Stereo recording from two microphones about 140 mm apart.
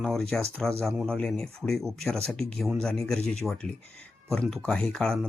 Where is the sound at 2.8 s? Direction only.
5° left (ahead or behind).